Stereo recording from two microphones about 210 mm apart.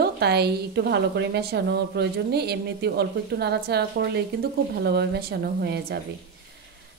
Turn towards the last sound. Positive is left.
turn(degrees=-50)  # may be behind; listen again after turning